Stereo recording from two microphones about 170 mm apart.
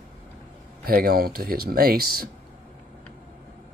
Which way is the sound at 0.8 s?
65° right (ahead or behind).